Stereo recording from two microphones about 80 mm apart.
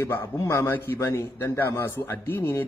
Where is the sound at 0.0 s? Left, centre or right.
Left.